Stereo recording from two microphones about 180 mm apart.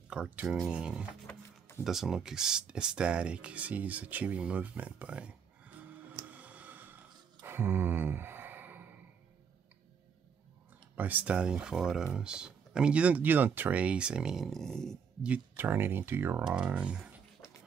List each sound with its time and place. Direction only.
0.1 s speech: 5° right (ahead or behind)
1.2 s a sound: 15° left (ahead or behind)
1.9 s speech: centre (ahead or behind)
6.2 s tick: 10° right (ahead or behind)
7.4 s sigh: 10° right (ahead or behind)
11.0 s speech: 10° right (ahead or behind)